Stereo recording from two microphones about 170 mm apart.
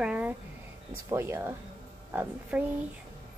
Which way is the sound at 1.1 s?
15° right (ahead or behind).